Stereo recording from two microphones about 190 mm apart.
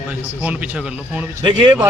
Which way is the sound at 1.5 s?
25° right (ahead or behind).